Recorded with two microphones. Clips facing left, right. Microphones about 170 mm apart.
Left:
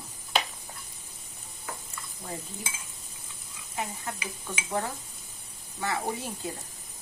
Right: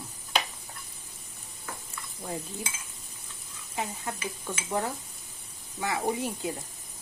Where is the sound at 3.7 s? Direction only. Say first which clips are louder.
Right 1 dB; 20° right (ahead or behind).